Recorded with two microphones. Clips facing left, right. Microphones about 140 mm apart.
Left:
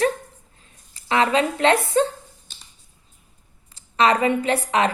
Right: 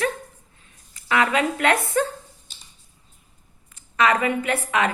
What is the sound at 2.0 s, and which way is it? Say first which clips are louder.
Speech: left 3 dB; 25° left (ahead or behind).